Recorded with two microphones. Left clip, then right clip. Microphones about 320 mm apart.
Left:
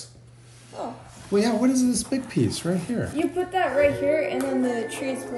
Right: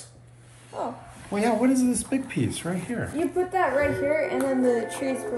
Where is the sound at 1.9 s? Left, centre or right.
Left.